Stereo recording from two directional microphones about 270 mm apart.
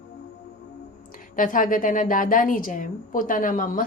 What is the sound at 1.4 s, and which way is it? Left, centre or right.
A woman's voice, left.